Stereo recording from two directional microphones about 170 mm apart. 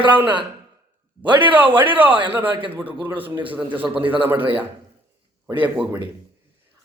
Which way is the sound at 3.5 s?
10° right (ahead or behind).